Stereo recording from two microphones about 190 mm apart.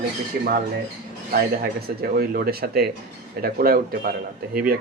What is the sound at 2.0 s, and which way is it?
Speech, 55° right (ahead or behind).